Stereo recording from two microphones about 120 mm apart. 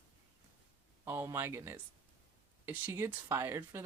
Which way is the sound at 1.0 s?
20° right (ahead or behind).